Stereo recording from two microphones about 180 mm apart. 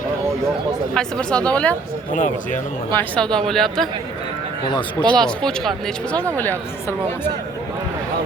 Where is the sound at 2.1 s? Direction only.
45° left (ahead or behind).